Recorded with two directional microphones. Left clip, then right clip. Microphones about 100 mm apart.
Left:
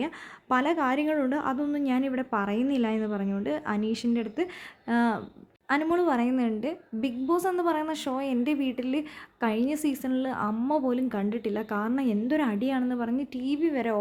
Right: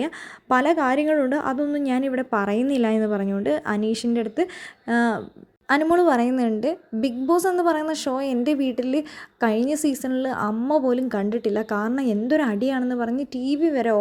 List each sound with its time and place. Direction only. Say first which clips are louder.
0.0 s a woman's voice: right 5 dB; 40° right (ahead or behind)
5.8 s a woman's voice: right 8 dB; 45° right (ahead or behind)